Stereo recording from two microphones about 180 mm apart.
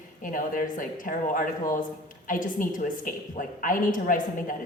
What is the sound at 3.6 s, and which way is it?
Speech, 50° left (ahead or behind).